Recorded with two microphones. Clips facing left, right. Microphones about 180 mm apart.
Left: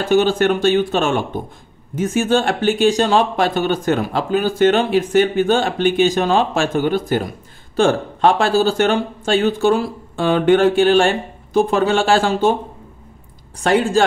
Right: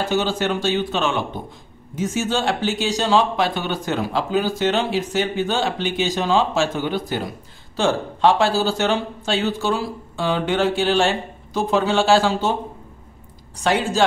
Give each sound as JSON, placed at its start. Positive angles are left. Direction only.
{"t": 0.1, "sound": "speech", "side_deg": 55}
{"t": 13.6, "sound": "speech", "side_deg": 55}